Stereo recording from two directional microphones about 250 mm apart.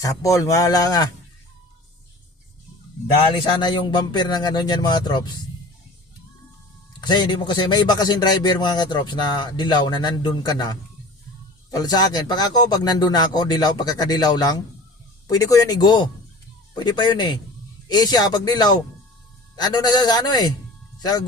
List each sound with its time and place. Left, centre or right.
0.0 s a man's voice: centre
3.4 s a man's voice: centre
7.0 s a man's voice: centre